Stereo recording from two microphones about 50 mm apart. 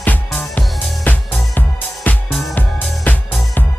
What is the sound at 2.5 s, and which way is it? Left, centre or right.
Music, left.